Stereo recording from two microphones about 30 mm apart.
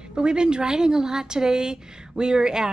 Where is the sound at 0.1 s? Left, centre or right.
Right.